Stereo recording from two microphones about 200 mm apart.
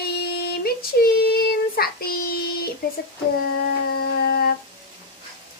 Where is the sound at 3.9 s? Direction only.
50° left (ahead or behind).